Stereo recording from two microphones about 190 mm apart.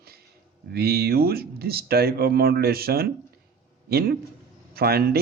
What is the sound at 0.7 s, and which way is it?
Speech, 55° right (ahead or behind).